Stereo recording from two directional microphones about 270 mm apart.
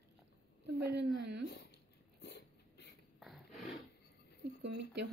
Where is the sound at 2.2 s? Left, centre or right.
Left.